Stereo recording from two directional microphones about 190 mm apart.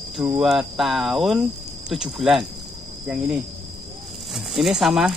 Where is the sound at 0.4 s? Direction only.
Centre (ahead or behind).